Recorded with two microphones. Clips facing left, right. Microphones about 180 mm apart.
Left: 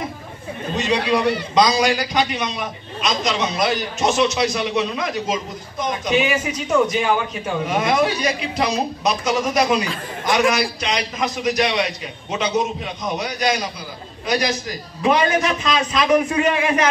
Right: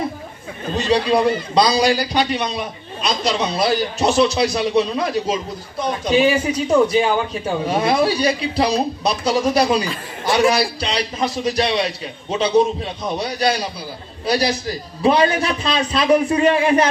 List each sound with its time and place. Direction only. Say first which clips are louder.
0.7 s a man's voice: right 3 dB; 35° right (ahead or behind)